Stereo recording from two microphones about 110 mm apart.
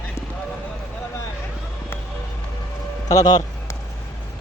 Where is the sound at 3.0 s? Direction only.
35° left (ahead or behind).